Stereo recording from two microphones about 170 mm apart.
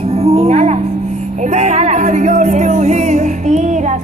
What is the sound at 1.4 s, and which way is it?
Speech, 45° right (ahead or behind).